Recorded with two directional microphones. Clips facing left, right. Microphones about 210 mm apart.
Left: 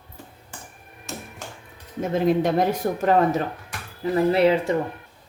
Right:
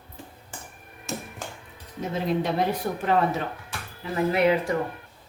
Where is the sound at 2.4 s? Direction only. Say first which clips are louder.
Left 4 dB; 45° left (ahead or behind).